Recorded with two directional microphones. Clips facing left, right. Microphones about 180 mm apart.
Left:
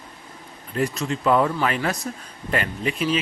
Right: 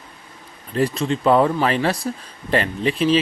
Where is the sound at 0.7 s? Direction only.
30° right (ahead or behind).